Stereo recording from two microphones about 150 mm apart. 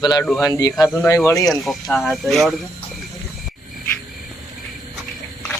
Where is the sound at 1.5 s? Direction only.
Centre (ahead or behind).